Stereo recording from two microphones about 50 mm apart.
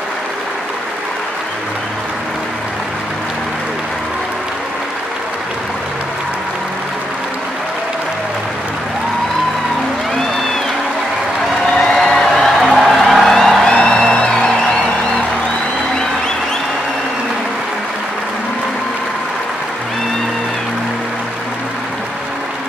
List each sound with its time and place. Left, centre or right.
11.8 s a sound: centre
12.6 s music: centre
13.7 s music: centre